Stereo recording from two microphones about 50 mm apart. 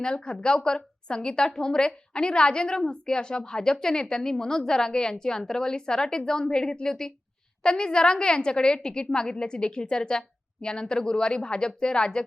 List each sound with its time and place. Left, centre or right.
0.0 s a woman's voice: centre